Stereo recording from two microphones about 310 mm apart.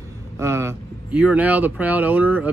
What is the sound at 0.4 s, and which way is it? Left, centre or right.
Speech, centre.